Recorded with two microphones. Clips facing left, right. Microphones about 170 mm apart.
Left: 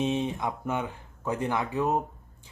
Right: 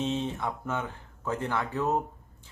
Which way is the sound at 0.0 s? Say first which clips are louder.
Left 2 dB; 15° left (ahead or behind).